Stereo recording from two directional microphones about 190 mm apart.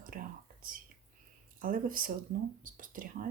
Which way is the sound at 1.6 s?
45° right (ahead or behind).